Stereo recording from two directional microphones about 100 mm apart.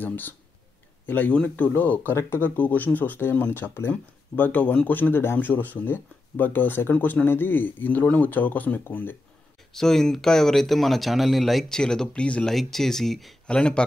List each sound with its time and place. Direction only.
0.0 s speech: 20° left (ahead or behind)
9.7 s speech: 5° left (ahead or behind)